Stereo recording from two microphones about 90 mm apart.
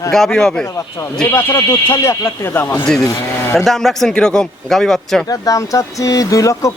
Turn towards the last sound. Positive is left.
turn(degrees=40)  # may be behind; listen again after turning